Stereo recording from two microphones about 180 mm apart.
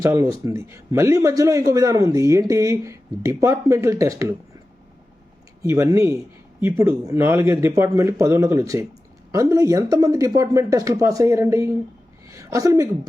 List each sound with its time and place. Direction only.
0.0 s a man's voice: 15° right (ahead or behind)
5.6 s a man's voice: 15° right (ahead or behind)